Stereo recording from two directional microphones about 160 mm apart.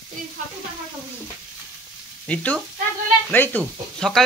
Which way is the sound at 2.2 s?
10° left (ahead or behind).